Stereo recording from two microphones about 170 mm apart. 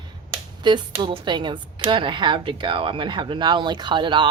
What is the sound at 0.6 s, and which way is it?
Speech, 25° right (ahead or behind).